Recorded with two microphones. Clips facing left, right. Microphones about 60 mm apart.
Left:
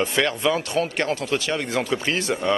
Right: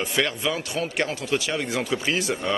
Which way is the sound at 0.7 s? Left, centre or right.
Centre.